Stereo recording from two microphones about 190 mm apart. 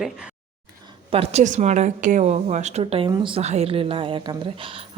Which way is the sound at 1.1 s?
30° right (ahead or behind).